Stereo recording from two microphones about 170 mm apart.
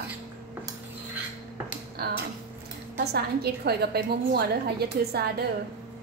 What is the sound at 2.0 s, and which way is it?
A woman's voice, 70° right (ahead or behind).